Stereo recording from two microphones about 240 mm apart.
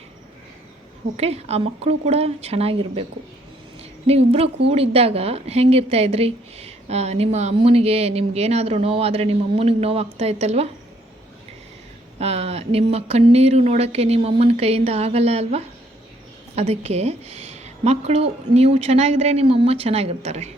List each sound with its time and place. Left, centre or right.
1.1 s a woman's voice: right
12.2 s a woman's voice: right